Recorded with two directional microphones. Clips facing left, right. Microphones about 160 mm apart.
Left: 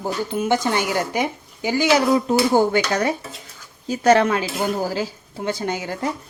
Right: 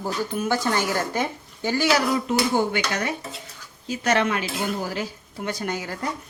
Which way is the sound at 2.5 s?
40° left (ahead or behind).